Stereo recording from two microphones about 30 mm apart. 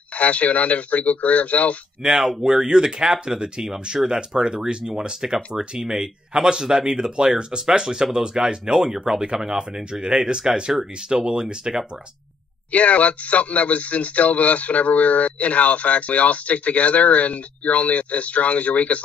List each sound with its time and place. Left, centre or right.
0.1 s speech: left
2.0 s speech: centre
12.7 s speech: left